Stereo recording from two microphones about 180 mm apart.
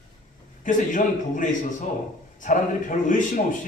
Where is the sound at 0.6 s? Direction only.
45° left (ahead or behind).